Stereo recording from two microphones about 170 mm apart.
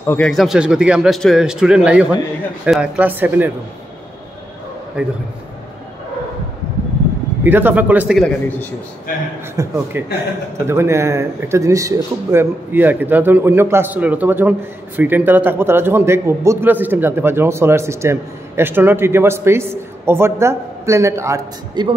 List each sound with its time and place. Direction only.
0.0 s speech: 10° left (ahead or behind)
0.3 s a man's voice: centre (ahead or behind)
5.0 s a man's voice: 5° right (ahead or behind)
7.4 s a man's voice: 10° right (ahead or behind)
8.2 s a man's voice: 10° left (ahead or behind)
9.6 s a man's voice: 15° right (ahead or behind)